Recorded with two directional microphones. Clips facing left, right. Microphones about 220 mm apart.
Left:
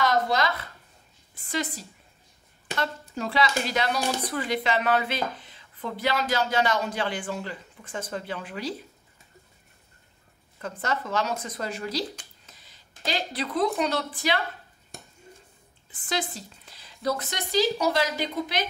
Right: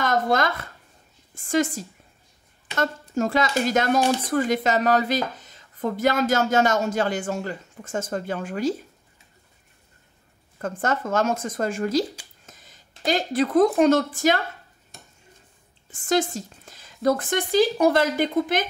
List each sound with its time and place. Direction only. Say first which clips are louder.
0.0 s speech: right 2 dB; 50° right (ahead or behind)
10.6 s speech: right 5 dB; 50° right (ahead or behind)
15.9 s speech: right 9 dB; 45° right (ahead or behind)